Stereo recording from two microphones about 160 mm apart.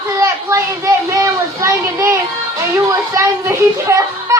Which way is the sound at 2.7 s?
20° right (ahead or behind).